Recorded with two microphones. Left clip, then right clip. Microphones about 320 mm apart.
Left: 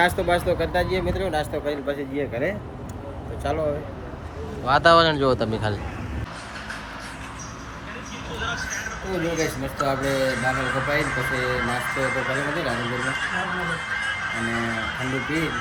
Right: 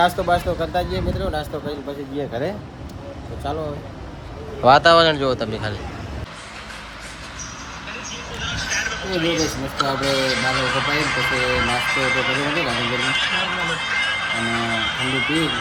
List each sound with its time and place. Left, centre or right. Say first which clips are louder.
0.0 s speech: right 3 dB; centre
4.8 s speech: right 2 dB; centre
9.7 s speech: right 3 dB; centre